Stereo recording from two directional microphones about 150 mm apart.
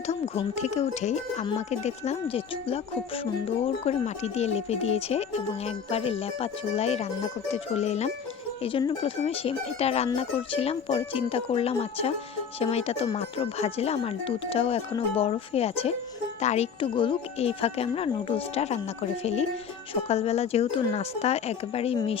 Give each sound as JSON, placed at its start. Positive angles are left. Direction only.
{"t": 0.1, "sound": "speech", "side_deg": 50}